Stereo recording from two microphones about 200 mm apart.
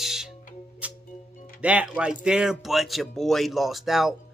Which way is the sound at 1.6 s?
5° right (ahead or behind).